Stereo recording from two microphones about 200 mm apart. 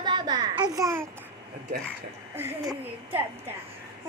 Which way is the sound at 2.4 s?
10° right (ahead or behind).